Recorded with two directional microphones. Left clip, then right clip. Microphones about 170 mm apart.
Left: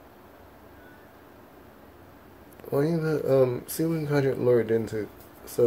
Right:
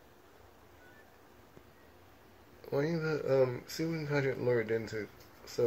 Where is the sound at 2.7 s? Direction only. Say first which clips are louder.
Left 7 dB; centre (ahead or behind).